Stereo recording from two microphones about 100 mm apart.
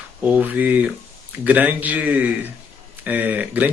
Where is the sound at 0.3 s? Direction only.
15° right (ahead or behind).